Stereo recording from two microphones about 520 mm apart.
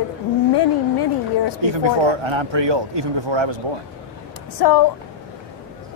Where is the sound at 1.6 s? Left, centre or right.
Right.